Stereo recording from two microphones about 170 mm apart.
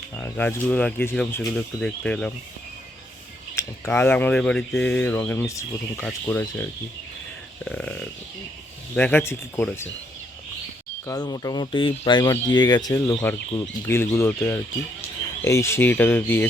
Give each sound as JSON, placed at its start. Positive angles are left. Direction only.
{"t": 0.2, "sound": "speech", "side_deg": 10}
{"t": 3.5, "sound": "speech", "side_deg": 15}
{"t": 7.6, "sound": "a sound", "side_deg": 5}
{"t": 9.0, "sound": "speech", "side_deg": 10}
{"t": 11.0, "sound": "speech", "side_deg": 25}